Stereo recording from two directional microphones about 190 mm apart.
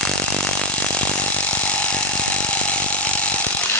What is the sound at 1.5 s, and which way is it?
Ratchet, 5° left (ahead or behind).